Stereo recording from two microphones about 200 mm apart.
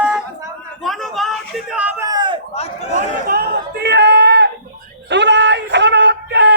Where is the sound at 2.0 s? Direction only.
20° right (ahead or behind).